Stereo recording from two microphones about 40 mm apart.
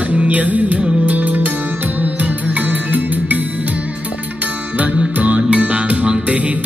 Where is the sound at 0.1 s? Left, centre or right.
Right.